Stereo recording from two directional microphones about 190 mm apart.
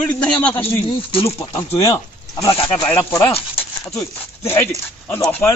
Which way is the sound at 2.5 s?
30° left (ahead or behind).